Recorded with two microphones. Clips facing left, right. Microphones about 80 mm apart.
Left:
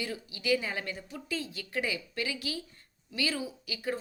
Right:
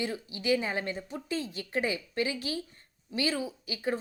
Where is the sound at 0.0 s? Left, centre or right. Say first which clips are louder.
Right 3 dB; right.